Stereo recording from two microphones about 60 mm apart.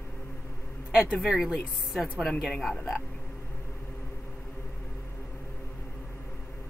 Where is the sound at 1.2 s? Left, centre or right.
Centre.